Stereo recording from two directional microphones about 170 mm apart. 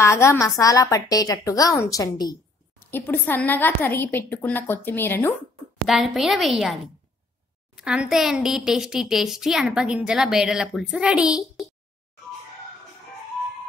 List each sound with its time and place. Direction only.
0.0 s a woman's voice: 15° left (ahead or behind)
2.9 s a woman's voice: 10° left (ahead or behind)
5.9 s a woman's voice: centre (ahead or behind)
7.7 s a woman's voice: 5° right (ahead or behind)